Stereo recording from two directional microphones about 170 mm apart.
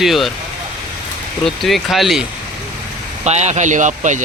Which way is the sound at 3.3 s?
40° right (ahead or behind).